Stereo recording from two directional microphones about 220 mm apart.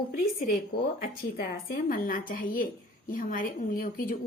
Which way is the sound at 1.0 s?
40° left (ahead or behind).